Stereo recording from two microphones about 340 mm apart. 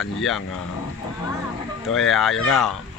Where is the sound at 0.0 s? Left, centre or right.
Centre.